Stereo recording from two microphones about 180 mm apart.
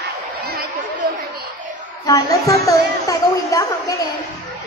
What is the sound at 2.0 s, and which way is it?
Speech, 20° left (ahead or behind).